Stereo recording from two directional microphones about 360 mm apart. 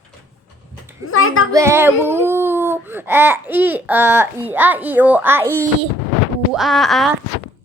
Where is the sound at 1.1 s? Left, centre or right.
Left.